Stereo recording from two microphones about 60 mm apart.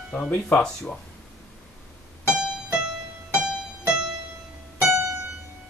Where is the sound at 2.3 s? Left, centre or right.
Centre.